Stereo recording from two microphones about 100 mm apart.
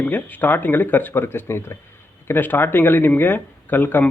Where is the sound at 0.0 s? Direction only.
15° left (ahead or behind).